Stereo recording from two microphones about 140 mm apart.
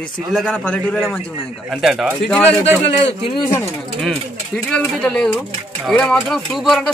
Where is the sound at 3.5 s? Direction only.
5° left (ahead or behind).